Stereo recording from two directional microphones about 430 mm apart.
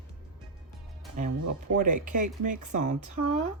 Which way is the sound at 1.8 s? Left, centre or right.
Centre.